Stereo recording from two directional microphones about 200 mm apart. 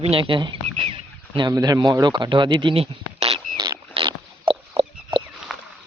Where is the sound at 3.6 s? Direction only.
20° right (ahead or behind).